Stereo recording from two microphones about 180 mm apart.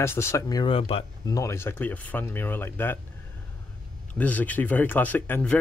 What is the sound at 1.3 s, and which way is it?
Speech, 15° left (ahead or behind).